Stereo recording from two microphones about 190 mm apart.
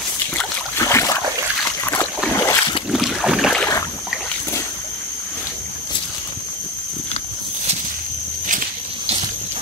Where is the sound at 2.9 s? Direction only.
Centre (ahead or behind).